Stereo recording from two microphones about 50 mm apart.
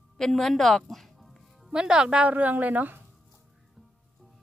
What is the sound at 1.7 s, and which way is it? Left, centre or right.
Speech, centre.